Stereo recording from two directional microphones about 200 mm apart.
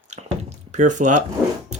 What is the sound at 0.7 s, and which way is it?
Speech, 40° right (ahead or behind).